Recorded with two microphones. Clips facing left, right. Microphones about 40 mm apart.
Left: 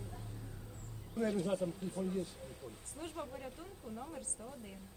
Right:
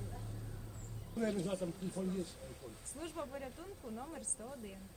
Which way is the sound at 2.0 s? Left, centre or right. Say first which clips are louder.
Left 2 dB; left.